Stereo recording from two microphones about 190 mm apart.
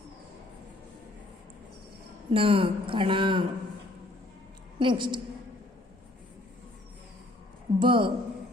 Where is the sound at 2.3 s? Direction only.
30° right (ahead or behind).